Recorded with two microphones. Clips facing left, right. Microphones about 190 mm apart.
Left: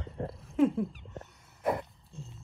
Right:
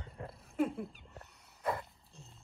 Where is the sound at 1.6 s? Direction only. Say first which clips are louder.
Left 6 dB; 20° left (ahead or behind).